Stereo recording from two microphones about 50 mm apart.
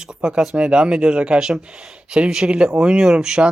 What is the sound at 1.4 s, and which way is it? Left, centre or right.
Speech, centre.